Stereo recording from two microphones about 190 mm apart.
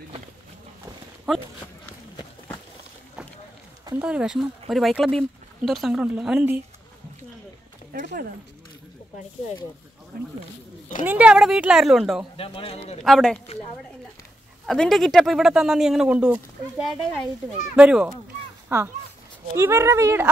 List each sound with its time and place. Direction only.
1.3 s speech: centre (ahead or behind)
3.9 s speech: 5° right (ahead or behind)
7.9 s speech: 50° right (ahead or behind)
10.1 s speech: 55° right (ahead or behind)
11.1 s speech: 5° right (ahead or behind)
12.4 s speech: 30° left (ahead or behind)
13.0 s speech: centre (ahead or behind)
14.7 s speech: centre (ahead or behind); by 20.2 s 15° right (ahead or behind)